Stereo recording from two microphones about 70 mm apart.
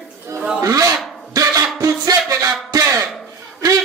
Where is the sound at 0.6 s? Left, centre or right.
Right.